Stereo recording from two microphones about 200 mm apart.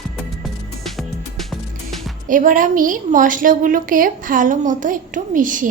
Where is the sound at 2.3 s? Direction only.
40° right (ahead or behind).